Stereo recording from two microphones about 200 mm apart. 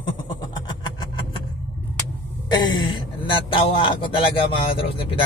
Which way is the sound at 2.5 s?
20° left (ahead or behind).